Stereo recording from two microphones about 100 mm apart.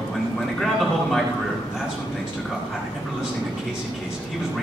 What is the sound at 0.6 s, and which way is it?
Speech, 5° left (ahead or behind).